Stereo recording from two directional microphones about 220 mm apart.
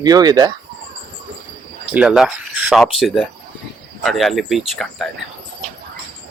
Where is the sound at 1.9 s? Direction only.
5° right (ahead or behind).